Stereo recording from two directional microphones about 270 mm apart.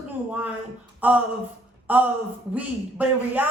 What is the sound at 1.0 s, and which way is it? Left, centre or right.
Speech, centre.